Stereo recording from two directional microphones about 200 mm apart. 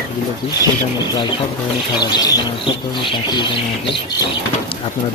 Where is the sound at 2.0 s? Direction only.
20° left (ahead or behind).